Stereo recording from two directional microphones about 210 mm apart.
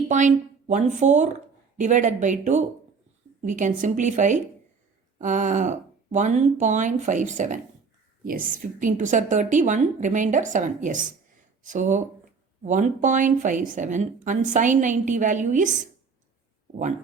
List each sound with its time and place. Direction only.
0.1 s speech: 35° right (ahead or behind)